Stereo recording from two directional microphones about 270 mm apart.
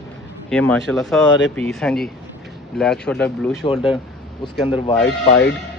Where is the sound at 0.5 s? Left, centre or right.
Centre.